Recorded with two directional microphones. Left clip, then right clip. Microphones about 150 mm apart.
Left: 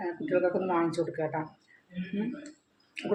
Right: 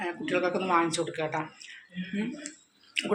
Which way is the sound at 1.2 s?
5° left (ahead or behind).